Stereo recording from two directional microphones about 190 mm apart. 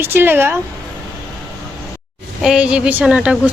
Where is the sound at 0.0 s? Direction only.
10° right (ahead or behind).